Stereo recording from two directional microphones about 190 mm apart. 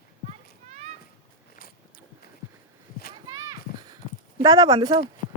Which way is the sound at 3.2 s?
20° right (ahead or behind).